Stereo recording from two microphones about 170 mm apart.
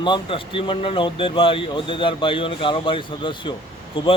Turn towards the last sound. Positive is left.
turn(degrees=35)  # may be behind; listen again after turning